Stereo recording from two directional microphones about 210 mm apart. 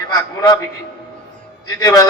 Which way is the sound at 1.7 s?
15° left (ahead or behind).